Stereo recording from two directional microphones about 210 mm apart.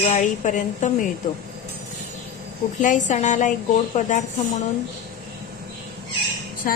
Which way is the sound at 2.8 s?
35° left (ahead or behind).